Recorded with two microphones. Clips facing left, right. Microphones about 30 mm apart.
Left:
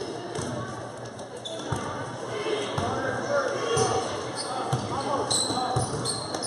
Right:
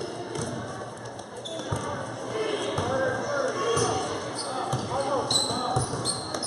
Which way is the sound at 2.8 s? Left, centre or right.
Centre.